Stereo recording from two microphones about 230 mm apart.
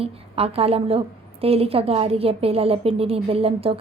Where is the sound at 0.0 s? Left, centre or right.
Right.